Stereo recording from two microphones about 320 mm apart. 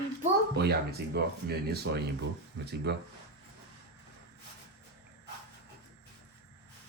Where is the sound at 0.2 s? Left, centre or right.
Right.